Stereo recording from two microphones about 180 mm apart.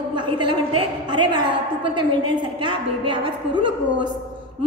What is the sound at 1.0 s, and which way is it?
A woman's voice, 25° right (ahead or behind).